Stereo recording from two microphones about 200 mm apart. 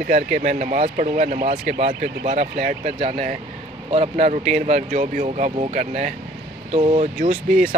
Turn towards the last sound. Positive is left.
turn(degrees=-40)  # may be behind; listen again after turning